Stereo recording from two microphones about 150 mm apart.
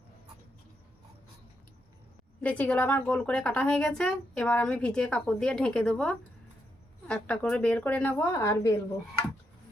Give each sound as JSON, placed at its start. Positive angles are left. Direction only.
{"t": 2.4, "sound": "a woman's voice", "side_deg": 10}